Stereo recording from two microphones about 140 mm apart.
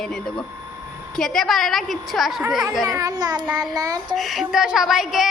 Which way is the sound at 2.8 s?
25° right (ahead or behind).